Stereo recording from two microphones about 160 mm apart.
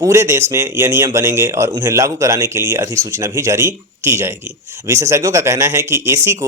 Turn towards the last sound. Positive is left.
turn(degrees=-15)  # may be behind; listen again after turning